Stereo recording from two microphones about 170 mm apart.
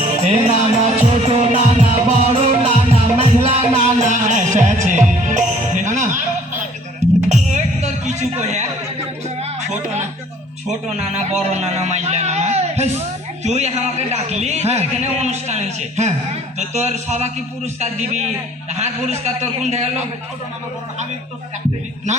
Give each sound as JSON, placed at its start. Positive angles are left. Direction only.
{"t": 0.2, "sound": "music", "side_deg": -40}
{"t": 7.3, "sound": "music", "side_deg": -45}
{"t": 8.4, "sound": "a man's voice", "side_deg": -40}
{"t": 9.4, "sound": "music", "side_deg": -40}
{"t": 11.4, "sound": "a man's voice", "side_deg": -40}